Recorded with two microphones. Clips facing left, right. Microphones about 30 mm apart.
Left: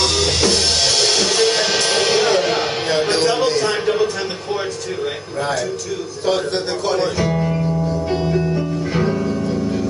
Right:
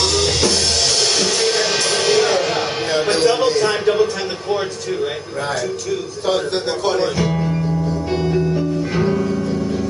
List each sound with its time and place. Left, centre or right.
0.0 s music: centre
1.9 s music: left
2.1 s music: centre
8.9 s music: centre